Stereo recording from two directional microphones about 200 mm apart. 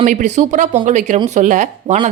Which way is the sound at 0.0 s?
40° right (ahead or behind).